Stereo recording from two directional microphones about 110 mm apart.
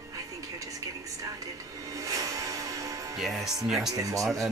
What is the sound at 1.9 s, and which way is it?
Music, 30° right (ahead or behind).